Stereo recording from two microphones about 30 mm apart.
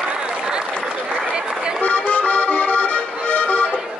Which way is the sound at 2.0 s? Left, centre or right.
Left.